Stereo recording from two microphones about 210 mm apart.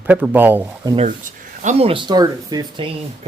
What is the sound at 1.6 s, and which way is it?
Speech, 30° right (ahead or behind).